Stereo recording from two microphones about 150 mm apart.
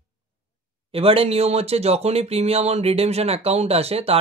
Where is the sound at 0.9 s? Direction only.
40° right (ahead or behind).